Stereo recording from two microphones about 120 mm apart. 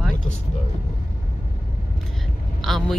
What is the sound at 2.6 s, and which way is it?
Speech, centre (ahead or behind).